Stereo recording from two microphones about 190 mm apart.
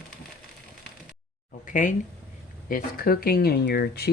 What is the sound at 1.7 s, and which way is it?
Speech, 45° left (ahead or behind).